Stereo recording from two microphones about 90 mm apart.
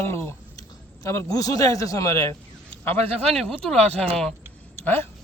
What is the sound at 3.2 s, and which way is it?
Speech, 5° left (ahead or behind).